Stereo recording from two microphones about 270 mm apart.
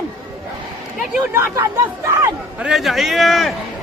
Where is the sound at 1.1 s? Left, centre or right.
Centre.